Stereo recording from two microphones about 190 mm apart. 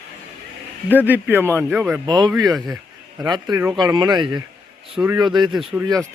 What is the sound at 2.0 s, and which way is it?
Speech, 20° right (ahead or behind).